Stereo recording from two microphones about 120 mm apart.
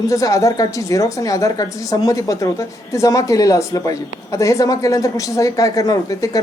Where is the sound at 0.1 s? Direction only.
25° left (ahead or behind).